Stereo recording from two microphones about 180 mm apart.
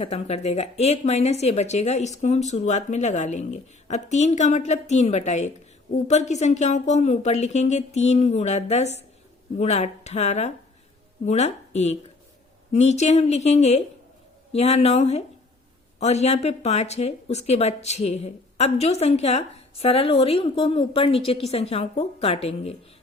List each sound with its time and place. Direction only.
0.0 s a woman's voice: 35° left (ahead or behind)